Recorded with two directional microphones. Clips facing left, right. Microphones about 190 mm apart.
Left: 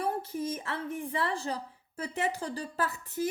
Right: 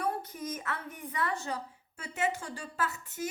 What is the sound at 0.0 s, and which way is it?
Speech, 30° left (ahead or behind).